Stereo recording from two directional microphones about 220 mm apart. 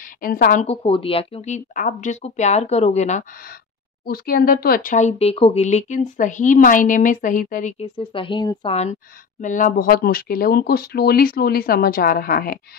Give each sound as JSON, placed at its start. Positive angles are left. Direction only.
{"t": 0.2, "sound": "speech", "side_deg": 40}
{"t": 4.0, "sound": "speech", "side_deg": 45}